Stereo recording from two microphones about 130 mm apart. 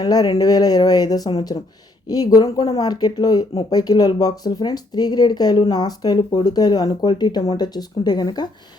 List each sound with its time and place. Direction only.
0.0 s speech: 30° left (ahead or behind)